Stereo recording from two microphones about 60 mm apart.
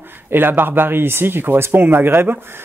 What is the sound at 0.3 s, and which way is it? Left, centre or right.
Speech, right.